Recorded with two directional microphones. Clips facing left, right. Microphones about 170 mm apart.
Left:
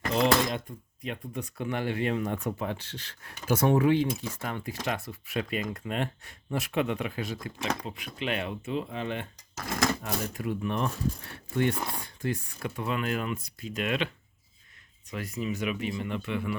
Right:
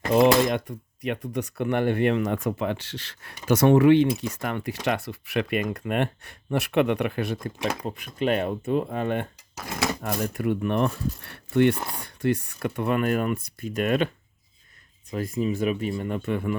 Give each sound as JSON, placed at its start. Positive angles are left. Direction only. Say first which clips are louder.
{"t": 0.1, "sound": "speech", "louder": "right 7 dB", "side_deg": -55}
{"t": 7.9, "sound": "speech", "louder": "right 8 dB", "side_deg": -45}
{"t": 10.0, "sound": "speech", "louder": "right 6 dB", "side_deg": -65}
{"t": 15.1, "sound": "speech", "louder": "right 7 dB", "side_deg": -40}